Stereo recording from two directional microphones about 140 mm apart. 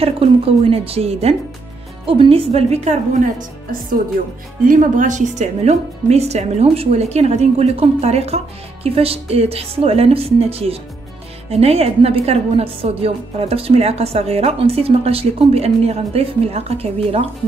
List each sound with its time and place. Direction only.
0.0 s a woman's voice: 45° right (ahead or behind); by 3.4 s 60° right (ahead or behind)
4.6 s a woman's voice: 65° right (ahead or behind); by 17.3 s 45° right (ahead or behind)